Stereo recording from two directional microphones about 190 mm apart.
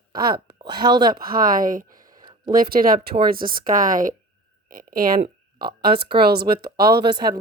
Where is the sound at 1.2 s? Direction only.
50° right (ahead or behind).